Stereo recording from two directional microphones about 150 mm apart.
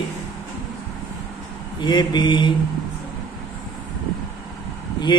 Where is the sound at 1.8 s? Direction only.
30° left (ahead or behind).